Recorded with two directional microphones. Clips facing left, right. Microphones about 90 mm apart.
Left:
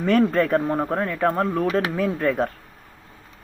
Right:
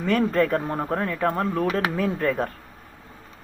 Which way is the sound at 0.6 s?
20° left (ahead or behind).